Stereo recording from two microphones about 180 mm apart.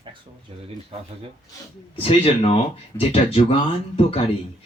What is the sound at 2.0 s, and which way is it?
Speech, 35° left (ahead or behind).